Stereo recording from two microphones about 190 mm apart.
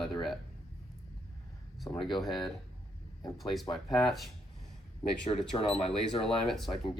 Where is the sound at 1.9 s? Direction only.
10° left (ahead or behind).